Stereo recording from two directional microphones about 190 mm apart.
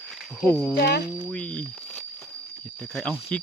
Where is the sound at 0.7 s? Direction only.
60° left (ahead or behind).